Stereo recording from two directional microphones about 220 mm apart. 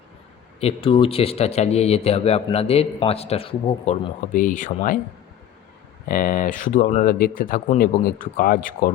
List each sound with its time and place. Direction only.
0.6 s a man's voice: 25° left (ahead or behind)
6.1 s speech: 40° left (ahead or behind)